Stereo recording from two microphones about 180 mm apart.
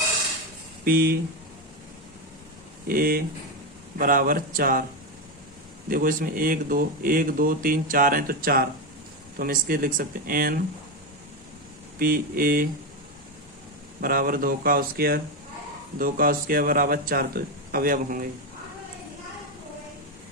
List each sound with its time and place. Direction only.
0.9 s speech: 55° right (ahead or behind)
2.8 s speech: 55° right (ahead or behind)
5.9 s speech: 50° right (ahead or behind)
11.9 s speech: 55° right (ahead or behind)
14.0 s speech: 55° right (ahead or behind)